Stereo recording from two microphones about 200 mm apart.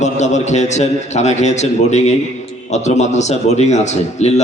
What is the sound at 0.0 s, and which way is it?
A man's voice, 35° left (ahead or behind).